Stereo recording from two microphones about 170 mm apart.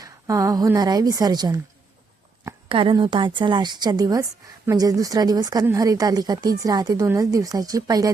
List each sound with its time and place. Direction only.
0.0 s a woman's voice: 20° right (ahead or behind)
2.6 s a woman's voice: 30° right (ahead or behind)